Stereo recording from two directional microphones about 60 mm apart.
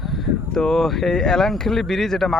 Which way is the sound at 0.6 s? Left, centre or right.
Centre.